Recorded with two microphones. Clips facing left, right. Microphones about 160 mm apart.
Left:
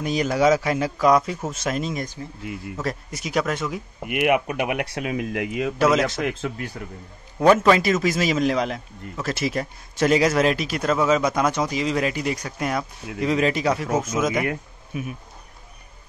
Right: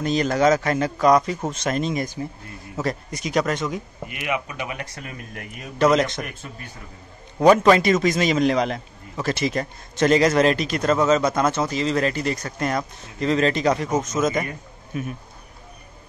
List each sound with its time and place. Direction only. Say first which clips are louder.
0.0 s a man's voice: right 1 dB; 10° left (ahead or behind)
4.1 s speech: left 8 dB; 60° left (ahead or behind); by 5.8 s 90° left
5.8 s speech: right 2 dB; 5° left (ahead or behind)
6.2 s speech: left 10 dB; 90° left
7.5 s a man's voice: right 2 dB; centre (ahead or behind)